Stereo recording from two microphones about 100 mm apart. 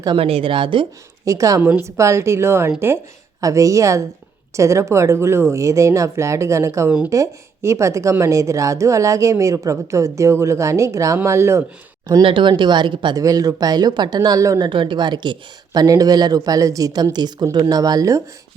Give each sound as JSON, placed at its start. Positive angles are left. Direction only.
{"t": 0.2, "sound": "a woman's voice", "side_deg": -70}
{"t": 1.2, "sound": "a woman's voice", "side_deg": -30}
{"t": 12.2, "sound": "speech", "side_deg": -55}
{"t": 13.1, "sound": "a woman's voice", "side_deg": -35}
{"t": 14.6, "sound": "speech", "side_deg": -55}